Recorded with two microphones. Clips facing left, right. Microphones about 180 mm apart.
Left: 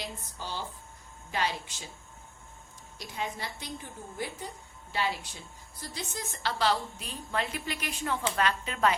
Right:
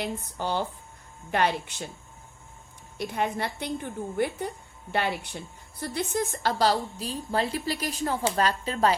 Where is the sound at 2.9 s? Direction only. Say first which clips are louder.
Right 8 dB; 60° right (ahead or behind).